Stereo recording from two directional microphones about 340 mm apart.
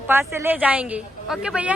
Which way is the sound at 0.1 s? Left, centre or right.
Centre.